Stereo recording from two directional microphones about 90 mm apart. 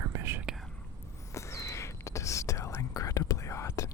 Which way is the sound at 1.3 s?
35° left (ahead or behind).